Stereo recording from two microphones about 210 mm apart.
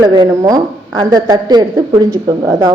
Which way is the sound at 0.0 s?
20° right (ahead or behind).